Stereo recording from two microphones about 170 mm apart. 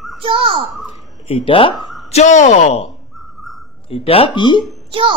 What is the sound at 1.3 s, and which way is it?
Speech, 30° left (ahead or behind).